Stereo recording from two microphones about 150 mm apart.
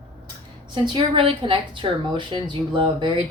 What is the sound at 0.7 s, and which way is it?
A woman's voice, 30° right (ahead or behind).